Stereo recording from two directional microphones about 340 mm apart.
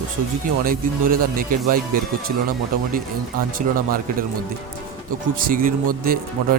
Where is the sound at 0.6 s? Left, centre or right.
Right.